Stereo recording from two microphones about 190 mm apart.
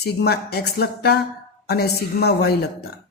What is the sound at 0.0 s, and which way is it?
Speech, 60° left (ahead or behind).